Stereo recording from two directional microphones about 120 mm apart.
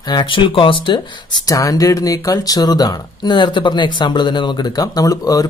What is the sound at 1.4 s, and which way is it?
Speech, 30° left (ahead or behind).